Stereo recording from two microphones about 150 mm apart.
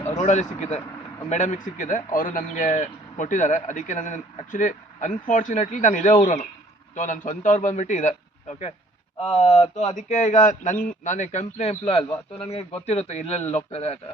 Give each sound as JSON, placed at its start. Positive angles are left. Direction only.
{"t": 0.2, "sound": "a man's voice", "side_deg": 50}